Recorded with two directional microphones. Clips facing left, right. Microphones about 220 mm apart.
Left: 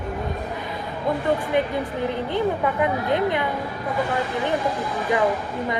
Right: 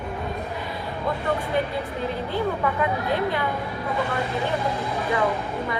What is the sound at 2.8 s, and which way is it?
Speech, 20° left (ahead or behind).